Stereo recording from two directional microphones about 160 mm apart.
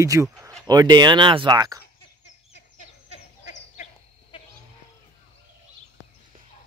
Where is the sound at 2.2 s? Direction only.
45° left (ahead or behind).